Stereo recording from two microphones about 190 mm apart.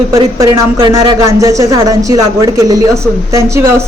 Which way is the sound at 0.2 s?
25° right (ahead or behind).